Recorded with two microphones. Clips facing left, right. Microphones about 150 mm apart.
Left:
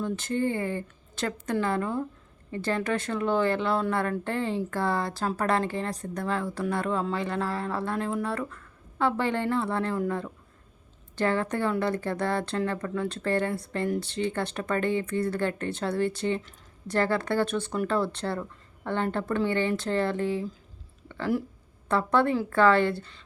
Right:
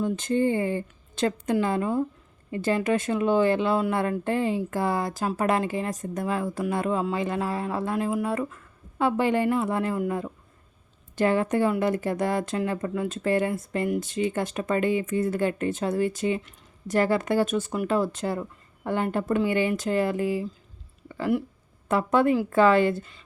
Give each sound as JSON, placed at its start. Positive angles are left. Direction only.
{"t": 0.0, "sound": "speech", "side_deg": -15}
{"t": 21.8, "sound": "speech", "side_deg": -15}